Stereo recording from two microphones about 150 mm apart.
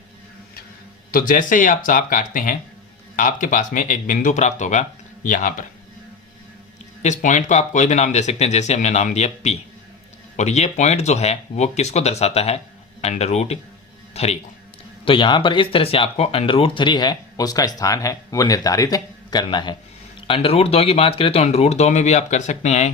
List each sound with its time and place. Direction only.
1.1 s speech: 65° left (ahead or behind)
7.0 s speech: 55° left (ahead or behind)
15.0 s speech: 35° left (ahead or behind); by 22.9 s 50° left (ahead or behind)